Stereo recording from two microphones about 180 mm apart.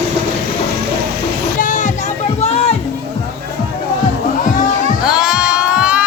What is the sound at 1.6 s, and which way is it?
Music, 45° left (ahead or behind).